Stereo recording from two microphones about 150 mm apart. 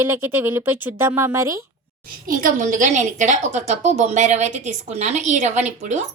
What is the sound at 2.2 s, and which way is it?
A woman's voice, 65° right (ahead or behind).